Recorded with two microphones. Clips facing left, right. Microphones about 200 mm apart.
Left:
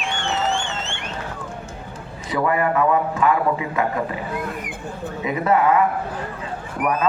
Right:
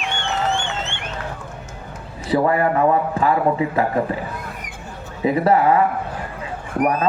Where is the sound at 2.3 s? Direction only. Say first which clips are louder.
Right 3 dB; 35° right (ahead or behind).